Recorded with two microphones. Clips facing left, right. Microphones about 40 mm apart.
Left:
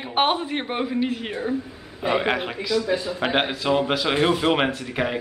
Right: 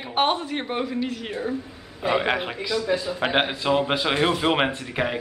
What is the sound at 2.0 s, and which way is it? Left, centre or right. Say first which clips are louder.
A man's voice: even; centre.